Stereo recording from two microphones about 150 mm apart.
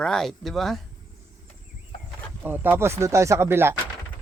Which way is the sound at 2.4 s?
10° right (ahead or behind).